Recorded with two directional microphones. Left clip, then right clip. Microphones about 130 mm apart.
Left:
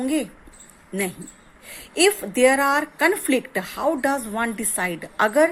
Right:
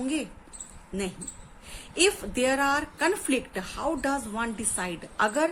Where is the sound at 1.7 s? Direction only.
45° left (ahead or behind).